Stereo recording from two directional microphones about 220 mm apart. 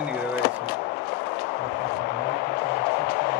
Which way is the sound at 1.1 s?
45° left (ahead or behind).